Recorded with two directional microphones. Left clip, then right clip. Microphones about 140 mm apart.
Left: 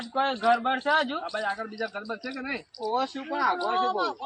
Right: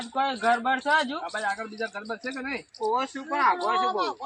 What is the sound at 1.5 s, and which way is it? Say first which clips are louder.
Speech: even; 5° left (ahead or behind).